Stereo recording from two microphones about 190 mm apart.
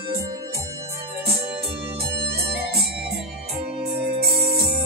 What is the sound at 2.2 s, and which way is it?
Music, 55° right (ahead or behind).